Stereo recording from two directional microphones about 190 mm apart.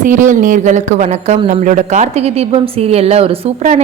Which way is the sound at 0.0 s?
40° right (ahead or behind).